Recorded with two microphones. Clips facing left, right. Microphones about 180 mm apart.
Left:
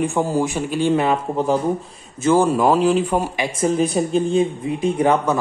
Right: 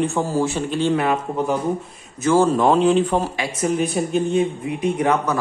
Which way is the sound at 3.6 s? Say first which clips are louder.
Left 2 dB; 30° left (ahead or behind).